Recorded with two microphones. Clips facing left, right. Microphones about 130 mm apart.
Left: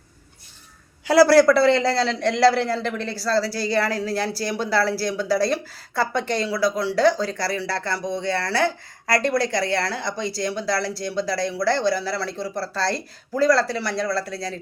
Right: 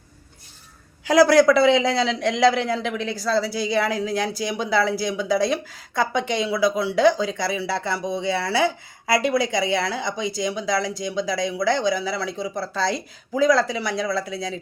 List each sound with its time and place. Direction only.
1.0 s speech: 5° left (ahead or behind)